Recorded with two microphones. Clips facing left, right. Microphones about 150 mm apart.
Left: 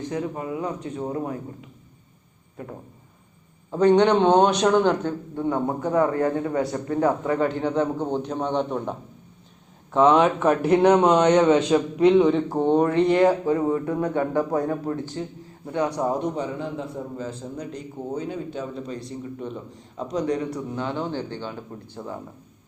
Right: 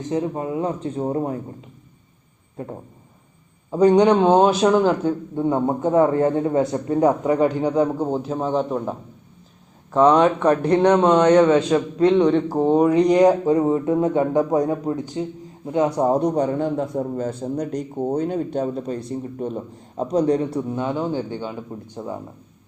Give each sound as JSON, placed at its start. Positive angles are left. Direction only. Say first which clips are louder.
{"t": 0.1, "sound": "speech", "louder": "right 7 dB", "side_deg": -25}
{"t": 2.6, "sound": "speech", "louder": "right 5 dB", "side_deg": -30}
{"t": 3.7, "sound": "a man's voice", "louder": "right 3 dB", "side_deg": -10}
{"t": 5.3, "sound": "a man's voice", "louder": "right 2 dB", "side_deg": -20}
{"t": 12.2, "sound": "speech", "louder": "right 2 dB", "side_deg": 0}
{"t": 16.0, "sound": "a man's voice", "louder": "right 6 dB", "side_deg": -35}
{"t": 16.4, "sound": "a man's voice", "louder": "right 8 dB", "side_deg": -50}